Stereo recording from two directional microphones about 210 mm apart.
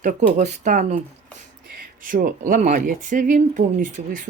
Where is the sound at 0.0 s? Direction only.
35° right (ahead or behind).